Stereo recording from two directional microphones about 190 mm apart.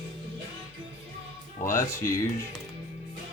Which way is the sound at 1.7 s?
15° left (ahead or behind).